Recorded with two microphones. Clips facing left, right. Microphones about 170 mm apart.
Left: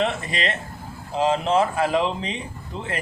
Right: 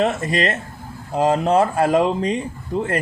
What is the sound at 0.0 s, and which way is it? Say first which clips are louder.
Speech: right 5 dB; 45° right (ahead or behind).